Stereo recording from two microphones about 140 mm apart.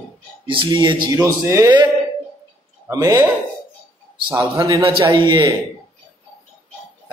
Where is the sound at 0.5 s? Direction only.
35° right (ahead or behind).